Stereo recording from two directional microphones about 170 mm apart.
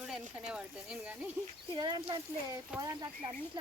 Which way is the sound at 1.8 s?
25° right (ahead or behind).